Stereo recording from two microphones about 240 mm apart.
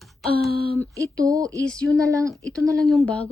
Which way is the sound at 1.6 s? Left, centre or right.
Centre.